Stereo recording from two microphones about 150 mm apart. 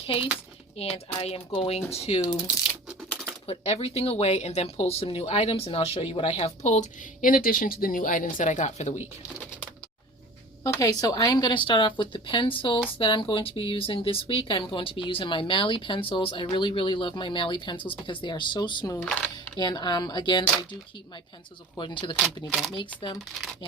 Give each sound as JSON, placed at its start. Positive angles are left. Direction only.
{"t": 0.0, "sound": "speech", "side_deg": 40}
{"t": 3.4, "sound": "speech", "side_deg": 40}
{"t": 10.6, "sound": "speech", "side_deg": 20}
{"t": 18.9, "sound": "speech", "side_deg": 10}
{"t": 19.5, "sound": "speech", "side_deg": 30}
{"t": 21.8, "sound": "speech", "side_deg": 30}
{"t": 22.4, "sound": "speech", "side_deg": 0}
{"t": 22.7, "sound": "speech", "side_deg": 35}